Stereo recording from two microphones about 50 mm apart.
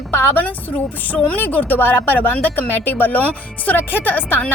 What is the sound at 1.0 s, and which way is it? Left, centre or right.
A woman's voice, left.